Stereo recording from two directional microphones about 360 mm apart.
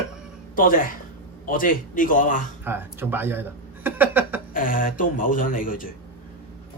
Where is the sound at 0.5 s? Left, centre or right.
Left.